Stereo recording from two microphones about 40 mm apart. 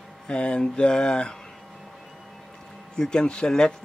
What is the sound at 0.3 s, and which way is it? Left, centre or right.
Speech, left.